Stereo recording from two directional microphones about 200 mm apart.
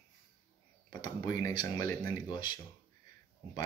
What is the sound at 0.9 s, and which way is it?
Speech, 20° left (ahead or behind).